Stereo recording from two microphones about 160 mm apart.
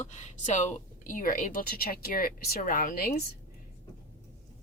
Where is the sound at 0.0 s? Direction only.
45° left (ahead or behind); by 3.2 s 75° left (ahead or behind).